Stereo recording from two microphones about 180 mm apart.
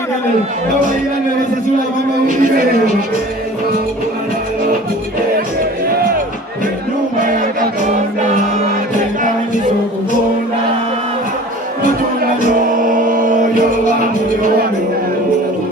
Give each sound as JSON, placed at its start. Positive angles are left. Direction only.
{"t": 2.2, "sound": "music", "side_deg": -50}
{"t": 12.6, "sound": "music", "side_deg": -50}